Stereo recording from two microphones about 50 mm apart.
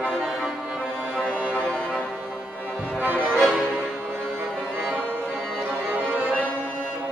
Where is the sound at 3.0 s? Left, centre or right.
Right.